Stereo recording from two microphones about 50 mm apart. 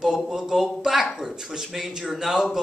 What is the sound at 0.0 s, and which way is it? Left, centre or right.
A man's voice, centre.